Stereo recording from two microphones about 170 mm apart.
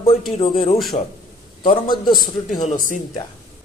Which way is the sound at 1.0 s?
40° left (ahead or behind).